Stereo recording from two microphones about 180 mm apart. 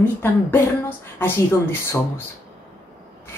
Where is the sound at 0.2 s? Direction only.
10° left (ahead or behind).